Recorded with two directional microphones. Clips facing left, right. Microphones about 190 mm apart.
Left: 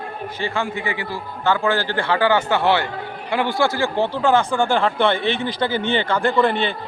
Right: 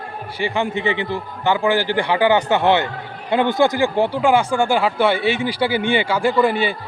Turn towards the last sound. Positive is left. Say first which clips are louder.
# right 1 dB
turn(degrees=-5)  # may be behind; listen again after turning